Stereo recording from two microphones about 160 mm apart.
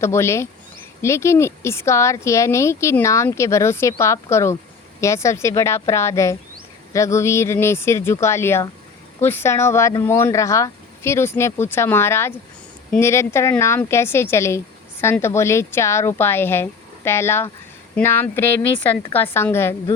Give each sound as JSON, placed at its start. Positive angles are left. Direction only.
{"t": 0.0, "sound": "speech", "side_deg": 15}